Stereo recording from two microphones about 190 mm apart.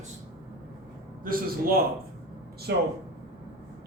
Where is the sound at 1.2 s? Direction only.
50° right (ahead or behind).